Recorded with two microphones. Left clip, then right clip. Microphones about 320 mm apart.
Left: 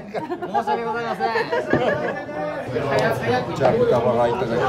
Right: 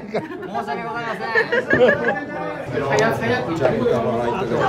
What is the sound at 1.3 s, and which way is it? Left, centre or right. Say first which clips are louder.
Speech: right 7 dB; centre.